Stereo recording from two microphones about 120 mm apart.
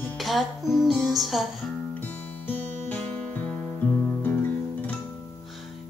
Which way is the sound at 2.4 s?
15° left (ahead or behind).